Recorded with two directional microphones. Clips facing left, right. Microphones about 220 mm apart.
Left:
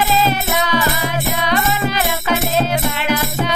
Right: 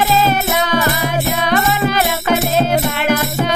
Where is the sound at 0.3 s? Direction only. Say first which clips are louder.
Right 2 dB; 50° right (ahead or behind).